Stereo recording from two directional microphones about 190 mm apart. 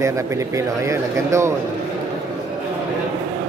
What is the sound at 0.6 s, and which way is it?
Speech, 15° right (ahead or behind).